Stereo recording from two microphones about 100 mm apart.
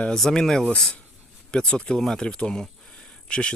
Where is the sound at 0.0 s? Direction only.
5° left (ahead or behind).